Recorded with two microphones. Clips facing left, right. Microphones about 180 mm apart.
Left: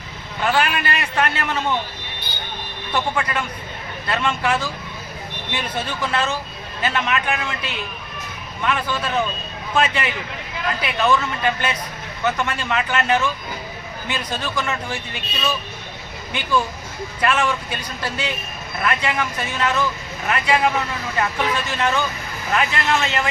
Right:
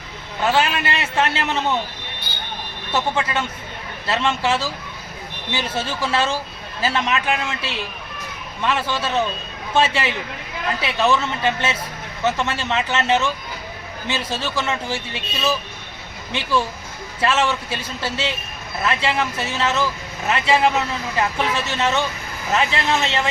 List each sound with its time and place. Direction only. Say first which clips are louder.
0.4 s speech: right 1 dB; 25° right (ahead or behind)
2.9 s speech: right 1 dB; 25° right (ahead or behind)